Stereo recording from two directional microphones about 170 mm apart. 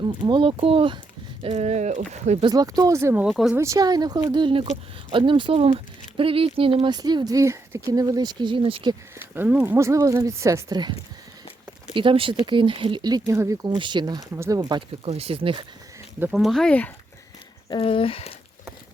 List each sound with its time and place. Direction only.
0.2 s speech: 30° right (ahead or behind)
2.4 s speech: 25° right (ahead or behind)
3.2 s speech: centre (ahead or behind)
3.6 s speech: 20° right (ahead or behind)
9.3 s speech: 10° right (ahead or behind)
11.9 s speech: 30° right (ahead or behind)
15.0 s speech: 35° right (ahead or behind)
16.3 s speech: centre (ahead or behind)
17.7 s speech: 30° left (ahead or behind)